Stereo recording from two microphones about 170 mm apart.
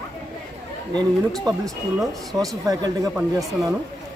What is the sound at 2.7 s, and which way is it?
Speech, 20° right (ahead or behind).